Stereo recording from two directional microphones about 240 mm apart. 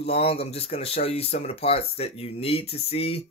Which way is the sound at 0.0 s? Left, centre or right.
Left.